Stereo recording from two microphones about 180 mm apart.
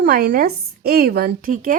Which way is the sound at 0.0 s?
60° right (ahead or behind).